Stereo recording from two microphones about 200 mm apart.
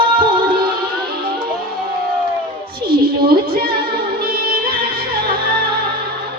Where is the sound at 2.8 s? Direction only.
50° right (ahead or behind).